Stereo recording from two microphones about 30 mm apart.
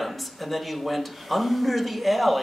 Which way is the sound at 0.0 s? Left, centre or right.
Centre.